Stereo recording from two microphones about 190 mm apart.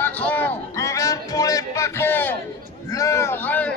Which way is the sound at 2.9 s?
15° left (ahead or behind).